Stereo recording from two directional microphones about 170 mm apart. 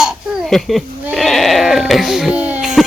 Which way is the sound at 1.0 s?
Centre (ahead or behind).